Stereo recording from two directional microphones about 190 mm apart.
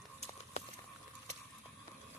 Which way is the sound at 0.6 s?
35° left (ahead or behind).